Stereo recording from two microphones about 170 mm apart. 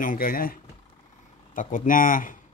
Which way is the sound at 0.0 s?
55° left (ahead or behind).